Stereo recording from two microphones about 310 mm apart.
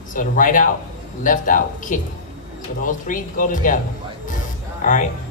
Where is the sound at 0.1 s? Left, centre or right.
Left.